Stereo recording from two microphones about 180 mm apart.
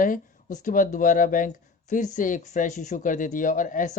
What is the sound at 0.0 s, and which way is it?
Speech, 45° left (ahead or behind).